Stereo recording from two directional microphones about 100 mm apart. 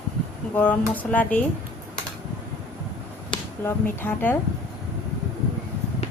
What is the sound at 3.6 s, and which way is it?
Speech, 20° left (ahead or behind).